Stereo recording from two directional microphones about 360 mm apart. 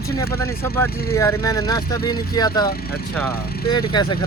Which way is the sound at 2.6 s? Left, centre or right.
Left.